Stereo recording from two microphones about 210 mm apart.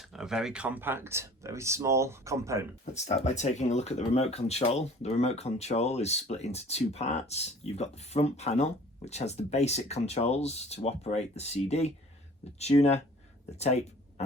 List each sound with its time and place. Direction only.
0.1 s speech: centre (ahead or behind)
2.9 s speech: 30° left (ahead or behind)